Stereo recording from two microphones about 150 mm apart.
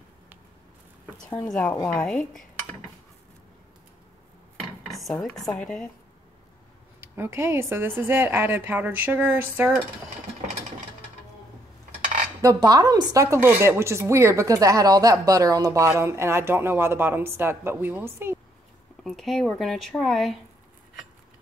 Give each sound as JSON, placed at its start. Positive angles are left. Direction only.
{"t": 1.5, "sound": "speech", "side_deg": 5}
{"t": 4.6, "sound": "dishes", "side_deg": 0}
{"t": 7.0, "sound": "speech", "side_deg": -15}
{"t": 12.4, "sound": "speech", "side_deg": -25}
{"t": 19.0, "sound": "speech", "side_deg": 0}